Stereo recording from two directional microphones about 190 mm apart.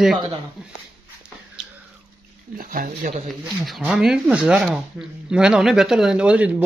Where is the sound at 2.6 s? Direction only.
50° right (ahead or behind).